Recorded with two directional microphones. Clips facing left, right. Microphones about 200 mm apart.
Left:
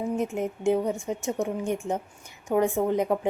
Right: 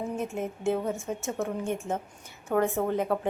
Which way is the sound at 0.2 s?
15° left (ahead or behind).